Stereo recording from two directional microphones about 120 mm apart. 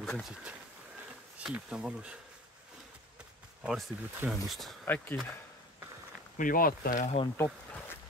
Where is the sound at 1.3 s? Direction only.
10° right (ahead or behind).